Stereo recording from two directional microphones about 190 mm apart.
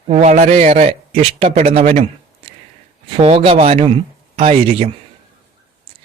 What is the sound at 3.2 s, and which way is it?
Speech, 30° right (ahead or behind).